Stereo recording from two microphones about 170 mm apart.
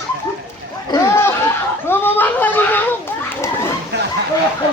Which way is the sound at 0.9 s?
15° left (ahead or behind).